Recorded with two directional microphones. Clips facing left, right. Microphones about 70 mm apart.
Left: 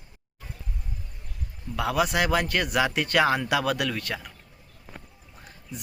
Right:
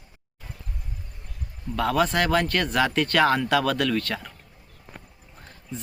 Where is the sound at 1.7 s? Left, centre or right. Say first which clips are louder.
Right 2 dB; centre.